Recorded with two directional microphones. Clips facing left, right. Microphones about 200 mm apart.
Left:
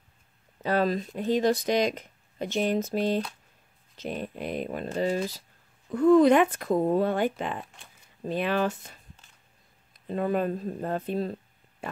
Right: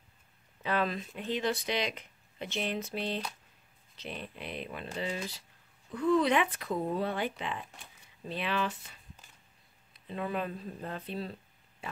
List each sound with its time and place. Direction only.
0.6 s speech: 40° left (ahead or behind)